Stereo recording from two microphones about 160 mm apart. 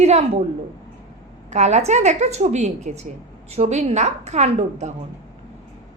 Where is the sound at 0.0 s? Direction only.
45° right (ahead or behind).